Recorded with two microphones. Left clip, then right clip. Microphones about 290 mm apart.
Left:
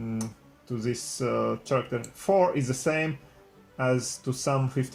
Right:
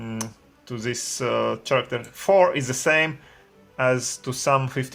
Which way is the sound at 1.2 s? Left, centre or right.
Right.